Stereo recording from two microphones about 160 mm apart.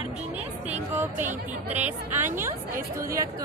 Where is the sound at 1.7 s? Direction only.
10° right (ahead or behind).